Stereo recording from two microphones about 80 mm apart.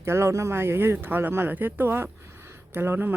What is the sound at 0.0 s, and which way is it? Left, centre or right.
Speech, right.